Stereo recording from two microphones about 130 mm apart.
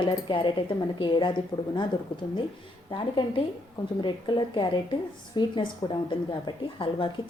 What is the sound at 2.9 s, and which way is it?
A woman's voice, 40° left (ahead or behind).